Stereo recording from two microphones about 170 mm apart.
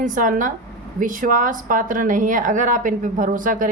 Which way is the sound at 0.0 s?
50° right (ahead or behind).